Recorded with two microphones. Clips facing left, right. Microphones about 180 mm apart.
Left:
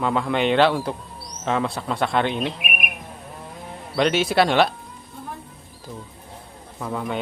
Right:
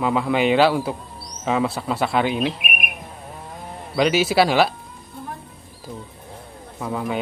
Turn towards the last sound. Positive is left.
turn(degrees=-5)  # may be behind; listen again after turning